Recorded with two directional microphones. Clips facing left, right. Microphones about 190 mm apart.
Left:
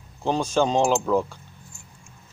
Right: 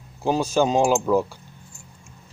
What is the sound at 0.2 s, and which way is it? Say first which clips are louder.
Speech: right 2 dB; 5° right (ahead or behind).